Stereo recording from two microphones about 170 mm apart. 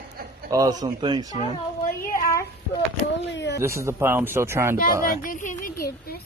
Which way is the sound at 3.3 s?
90° left.